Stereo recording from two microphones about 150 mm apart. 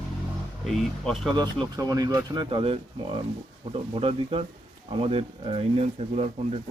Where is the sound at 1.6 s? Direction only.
25° right (ahead or behind); by 6.6 s 45° right (ahead or behind).